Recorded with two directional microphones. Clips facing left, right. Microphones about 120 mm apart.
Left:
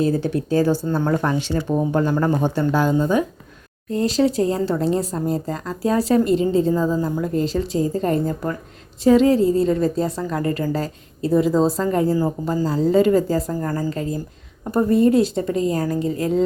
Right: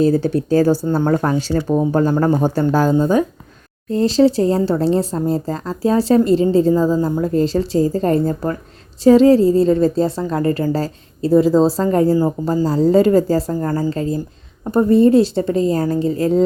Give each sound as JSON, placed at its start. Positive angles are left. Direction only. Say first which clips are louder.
{"t": 0.0, "sound": "a woman's voice", "louder": "right 5 dB", "side_deg": -30}
{"t": 0.9, "sound": "a woman's voice", "louder": "right 4 dB", "side_deg": -25}